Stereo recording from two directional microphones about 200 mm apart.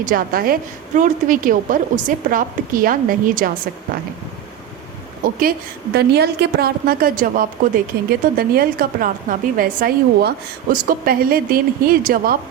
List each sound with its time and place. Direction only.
0.0 s a woman's voice: 45° right (ahead or behind)
5.4 s a woman's voice: 50° right (ahead or behind)